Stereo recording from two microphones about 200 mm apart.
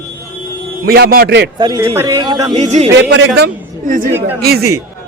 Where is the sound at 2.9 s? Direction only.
65° right (ahead or behind).